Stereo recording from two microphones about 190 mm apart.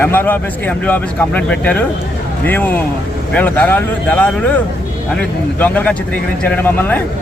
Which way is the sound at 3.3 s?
10° left (ahead or behind).